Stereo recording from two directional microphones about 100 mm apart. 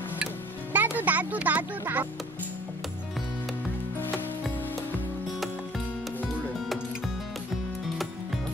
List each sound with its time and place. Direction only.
0.7 s music: 15° right (ahead or behind)